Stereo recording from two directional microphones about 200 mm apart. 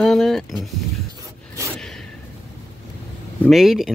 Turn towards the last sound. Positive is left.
turn(degrees=0)  # may be behind; listen again after turning